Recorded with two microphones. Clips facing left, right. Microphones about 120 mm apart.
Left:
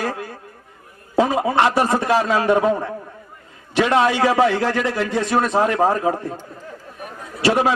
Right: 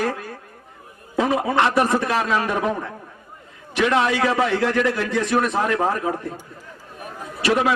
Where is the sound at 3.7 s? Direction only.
30° left (ahead or behind).